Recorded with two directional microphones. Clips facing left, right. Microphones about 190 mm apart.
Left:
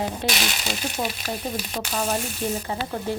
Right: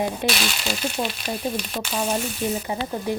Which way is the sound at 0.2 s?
15° right (ahead or behind).